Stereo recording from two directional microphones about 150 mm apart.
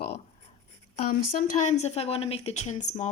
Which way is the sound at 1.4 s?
55° left (ahead or behind).